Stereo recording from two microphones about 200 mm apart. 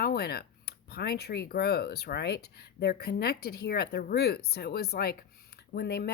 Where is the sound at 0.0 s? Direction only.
50° left (ahead or behind).